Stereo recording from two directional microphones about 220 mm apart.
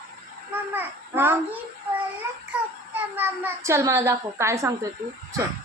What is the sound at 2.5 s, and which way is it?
A child's voice, 10° right (ahead or behind).